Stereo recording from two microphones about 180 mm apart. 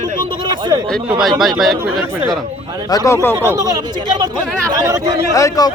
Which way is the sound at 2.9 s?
15° left (ahead or behind).